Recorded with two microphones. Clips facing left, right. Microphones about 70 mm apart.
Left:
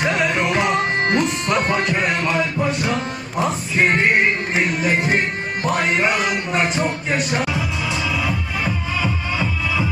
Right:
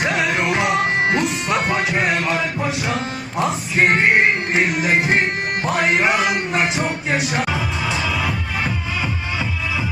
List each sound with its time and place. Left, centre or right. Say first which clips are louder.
0.0 s music: even; centre
7.3 s music: right 1 dB; right